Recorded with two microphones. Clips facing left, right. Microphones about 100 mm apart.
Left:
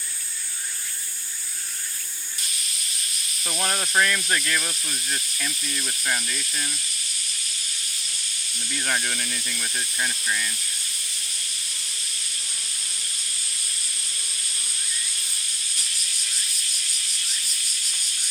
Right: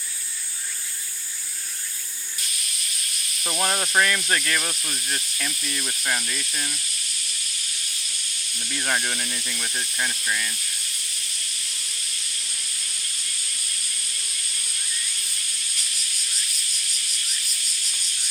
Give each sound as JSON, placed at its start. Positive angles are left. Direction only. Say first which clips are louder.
{"t": 3.4, "sound": "speech", "louder": "right 2 dB", "side_deg": -20}
{"t": 4.0, "sound": "speech", "louder": "right 1 dB", "side_deg": -5}
{"t": 4.7, "sound": "speech", "louder": "right 1 dB", "side_deg": -15}
{"t": 8.7, "sound": "speech", "louder": "right 1 dB", "side_deg": -15}